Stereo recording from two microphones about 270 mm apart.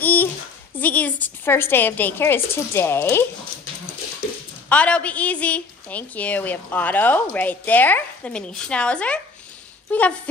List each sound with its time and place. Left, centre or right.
0.0 s a sound: centre
0.7 s a woman's voice: centre
4.6 s a woman's voice: centre